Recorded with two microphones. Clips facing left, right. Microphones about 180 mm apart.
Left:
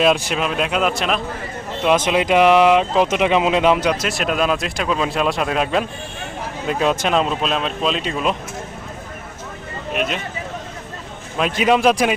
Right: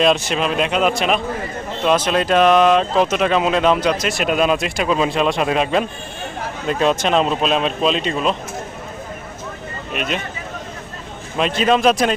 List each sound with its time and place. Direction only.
0.0 s speech: 5° left (ahead or behind)
1.8 s speech: 10° left (ahead or behind)
4.0 s speech: centre (ahead or behind)
9.9 s speech: centre (ahead or behind)
11.3 s speech: 10° left (ahead or behind)